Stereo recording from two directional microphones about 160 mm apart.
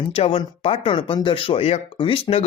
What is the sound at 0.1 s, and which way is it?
Speech, 35° left (ahead or behind).